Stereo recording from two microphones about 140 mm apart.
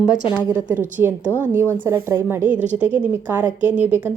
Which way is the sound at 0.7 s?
15° right (ahead or behind).